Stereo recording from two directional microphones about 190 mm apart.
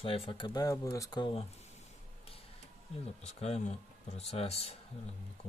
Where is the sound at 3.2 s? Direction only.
35° left (ahead or behind).